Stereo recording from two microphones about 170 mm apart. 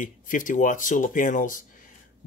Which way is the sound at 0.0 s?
50° left (ahead or behind).